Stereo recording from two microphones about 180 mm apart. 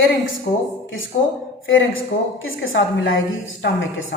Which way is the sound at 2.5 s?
90° left.